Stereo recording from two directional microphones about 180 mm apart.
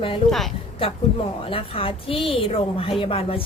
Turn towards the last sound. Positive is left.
turn(degrees=30)  # may be behind; listen again after turning